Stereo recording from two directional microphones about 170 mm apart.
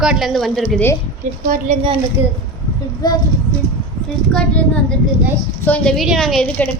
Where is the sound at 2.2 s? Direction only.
10° right (ahead or behind).